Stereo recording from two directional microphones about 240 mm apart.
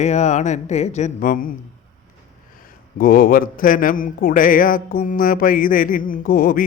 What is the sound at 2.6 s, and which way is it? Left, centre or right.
A man's voice, left.